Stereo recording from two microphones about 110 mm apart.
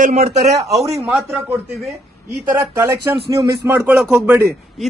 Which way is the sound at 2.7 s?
25° right (ahead or behind).